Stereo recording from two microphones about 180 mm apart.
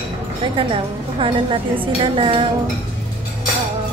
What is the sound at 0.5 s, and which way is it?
A woman's voice, 30° right (ahead or behind).